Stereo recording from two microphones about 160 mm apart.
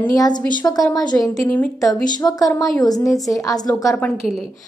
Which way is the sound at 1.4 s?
10° left (ahead or behind).